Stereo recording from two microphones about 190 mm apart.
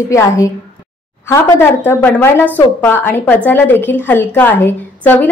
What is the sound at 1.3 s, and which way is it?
A woman's voice, 10° left (ahead or behind).